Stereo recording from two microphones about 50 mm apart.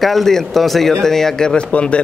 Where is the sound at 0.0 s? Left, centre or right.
Centre.